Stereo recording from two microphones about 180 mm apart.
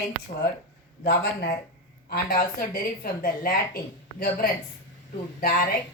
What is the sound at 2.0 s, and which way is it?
A woman's voice, 55° left (ahead or behind).